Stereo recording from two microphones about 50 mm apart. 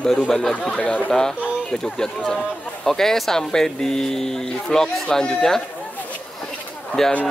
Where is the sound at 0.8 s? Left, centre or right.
Left.